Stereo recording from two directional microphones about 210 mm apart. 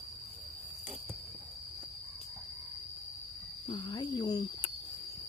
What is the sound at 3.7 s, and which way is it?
Cricket, 25° left (ahead or behind).